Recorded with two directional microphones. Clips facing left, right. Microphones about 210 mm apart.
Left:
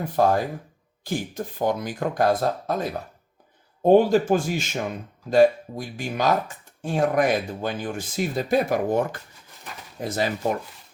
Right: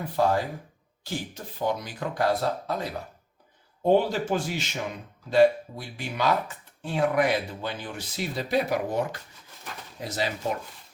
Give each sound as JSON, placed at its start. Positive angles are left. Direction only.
{"t": 0.2, "sound": "speech", "side_deg": 50}
{"t": 3.8, "sound": "speech", "side_deg": 50}